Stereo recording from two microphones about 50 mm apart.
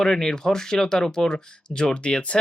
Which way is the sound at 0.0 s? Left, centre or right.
Centre.